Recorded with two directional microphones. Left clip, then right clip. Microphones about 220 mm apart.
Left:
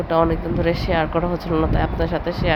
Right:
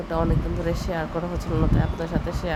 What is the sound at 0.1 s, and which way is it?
A woman's voice, 15° left (ahead or behind).